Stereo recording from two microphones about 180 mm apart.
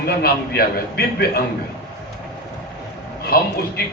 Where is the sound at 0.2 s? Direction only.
60° left (ahead or behind).